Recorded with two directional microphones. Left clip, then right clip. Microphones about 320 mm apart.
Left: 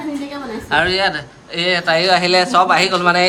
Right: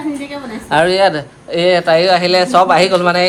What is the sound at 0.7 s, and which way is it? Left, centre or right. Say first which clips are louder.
Speech: right 4 dB; centre.